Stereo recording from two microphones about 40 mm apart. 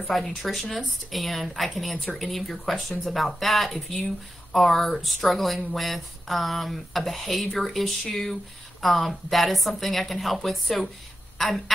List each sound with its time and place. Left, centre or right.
0.1 s speech: centre